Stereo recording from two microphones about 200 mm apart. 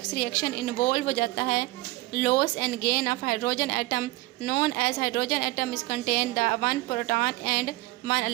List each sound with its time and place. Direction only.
0.2 s a woman's voice: 45° left (ahead or behind)